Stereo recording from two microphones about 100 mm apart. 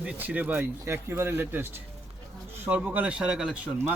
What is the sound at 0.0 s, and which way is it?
Speech, 15° right (ahead or behind).